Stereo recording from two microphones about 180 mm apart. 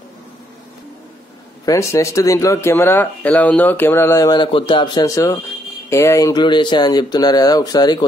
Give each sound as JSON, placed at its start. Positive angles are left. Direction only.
{"t": 1.7, "sound": "speech", "side_deg": 15}